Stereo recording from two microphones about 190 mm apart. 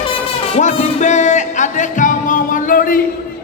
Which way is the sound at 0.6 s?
40° left (ahead or behind).